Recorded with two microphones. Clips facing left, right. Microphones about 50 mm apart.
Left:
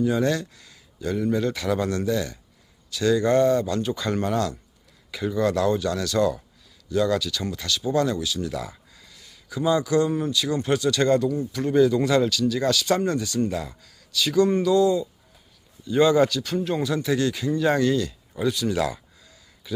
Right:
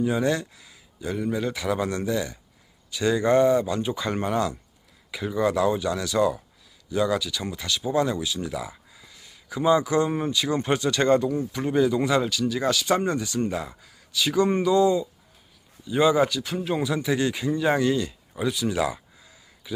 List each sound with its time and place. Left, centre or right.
0.0 s speech: centre; by 11.6 s right
11.6 s speech: centre
15.9 s speech: centre